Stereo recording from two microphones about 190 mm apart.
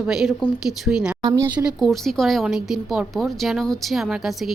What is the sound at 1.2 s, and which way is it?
Speech, 20° right (ahead or behind).